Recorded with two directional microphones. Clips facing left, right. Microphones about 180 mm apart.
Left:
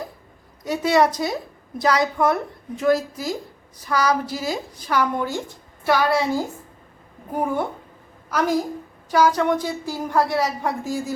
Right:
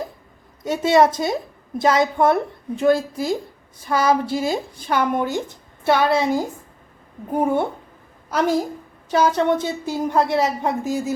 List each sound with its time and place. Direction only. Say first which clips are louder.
0.6 s a woman's voice: right 3 dB; 25° right (ahead or behind)